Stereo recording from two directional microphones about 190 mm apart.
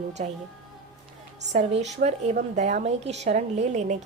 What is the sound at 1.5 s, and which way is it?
A woman's voice, 35° right (ahead or behind).